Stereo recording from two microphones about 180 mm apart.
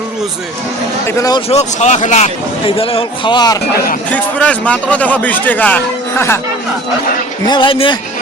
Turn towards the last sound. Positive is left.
turn(degrees=30)  # may be behind; listen again after turning